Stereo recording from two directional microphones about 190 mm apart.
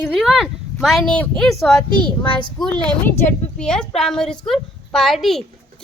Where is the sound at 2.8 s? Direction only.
10° left (ahead or behind).